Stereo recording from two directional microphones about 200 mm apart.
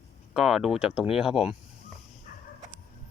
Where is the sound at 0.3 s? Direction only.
5° right (ahead or behind).